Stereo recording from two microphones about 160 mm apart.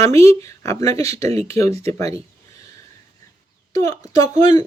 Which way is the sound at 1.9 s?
20° left (ahead or behind).